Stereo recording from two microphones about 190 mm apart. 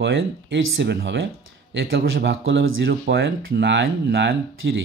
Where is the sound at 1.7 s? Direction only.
85° right.